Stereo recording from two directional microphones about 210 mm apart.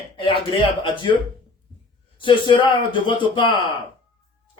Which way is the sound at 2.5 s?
25° left (ahead or behind).